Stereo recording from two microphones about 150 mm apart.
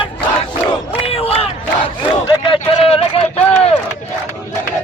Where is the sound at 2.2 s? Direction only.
35° left (ahead or behind).